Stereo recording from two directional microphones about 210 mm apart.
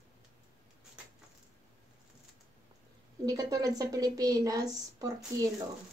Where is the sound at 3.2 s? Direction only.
15° right (ahead or behind).